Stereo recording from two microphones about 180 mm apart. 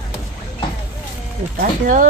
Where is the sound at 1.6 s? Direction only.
50° right (ahead or behind).